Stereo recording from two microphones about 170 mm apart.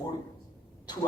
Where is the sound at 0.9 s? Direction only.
25° left (ahead or behind).